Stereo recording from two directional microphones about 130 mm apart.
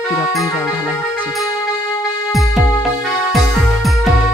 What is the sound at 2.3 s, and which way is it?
Music, centre (ahead or behind).